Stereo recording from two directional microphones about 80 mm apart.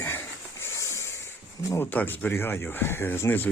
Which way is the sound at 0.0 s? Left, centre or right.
Left.